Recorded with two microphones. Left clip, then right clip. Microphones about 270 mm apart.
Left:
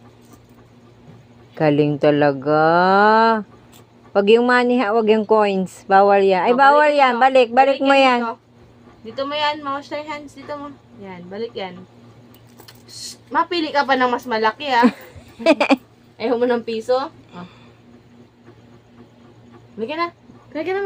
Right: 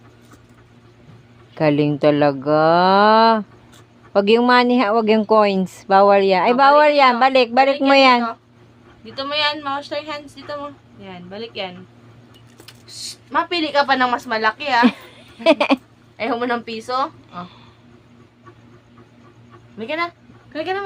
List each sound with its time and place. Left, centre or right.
1.5 s a woman's voice: centre
12.6 s a sound: right
13.5 s a woman's voice: centre
15.4 s speech: centre
16.1 s a woman's voice: right
19.8 s a woman's voice: right